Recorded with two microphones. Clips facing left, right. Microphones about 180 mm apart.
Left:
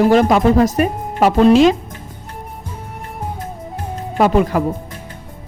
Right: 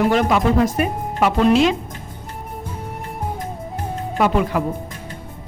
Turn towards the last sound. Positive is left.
turn(degrees=40)  # may be behind; listen again after turning